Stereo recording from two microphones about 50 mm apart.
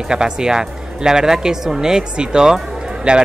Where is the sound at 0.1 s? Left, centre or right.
Centre.